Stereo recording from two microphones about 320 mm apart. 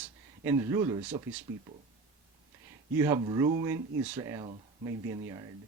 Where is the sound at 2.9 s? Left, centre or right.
Centre.